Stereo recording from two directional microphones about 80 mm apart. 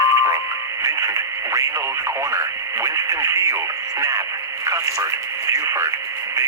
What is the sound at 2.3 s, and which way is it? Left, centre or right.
Speech, right.